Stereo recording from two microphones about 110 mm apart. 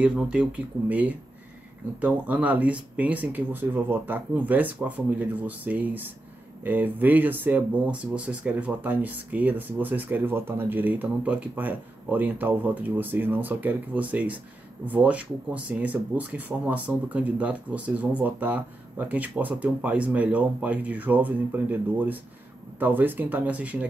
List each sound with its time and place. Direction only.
0.0 s speech: 10° right (ahead or behind)